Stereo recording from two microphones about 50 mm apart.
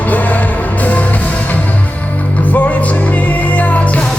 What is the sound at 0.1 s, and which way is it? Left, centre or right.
Music, left.